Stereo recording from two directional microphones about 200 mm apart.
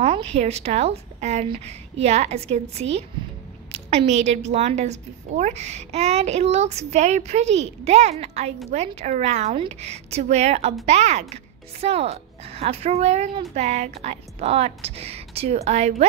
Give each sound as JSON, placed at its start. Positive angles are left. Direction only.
{"t": 0.0, "sound": "a woman's voice", "side_deg": -30}
{"t": 4.1, "sound": "a woman's voice", "side_deg": -35}